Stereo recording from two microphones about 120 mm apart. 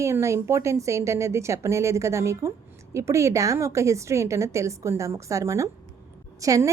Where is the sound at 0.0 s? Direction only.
25° right (ahead or behind).